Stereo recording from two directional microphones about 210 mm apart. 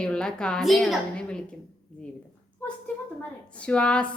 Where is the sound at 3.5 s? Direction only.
5° left (ahead or behind).